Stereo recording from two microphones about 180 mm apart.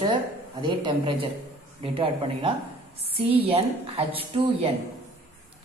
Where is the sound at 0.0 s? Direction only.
25° right (ahead or behind).